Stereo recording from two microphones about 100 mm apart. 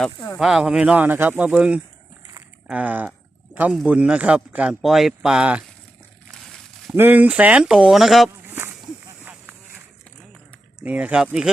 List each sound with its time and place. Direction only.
0.3 s speech: 5° right (ahead or behind)
6.9 s speech: 20° right (ahead or behind); by 8.3 s centre (ahead or behind)
9.2 s a sound: 15° right (ahead or behind)
10.8 s speech: 15° right (ahead or behind)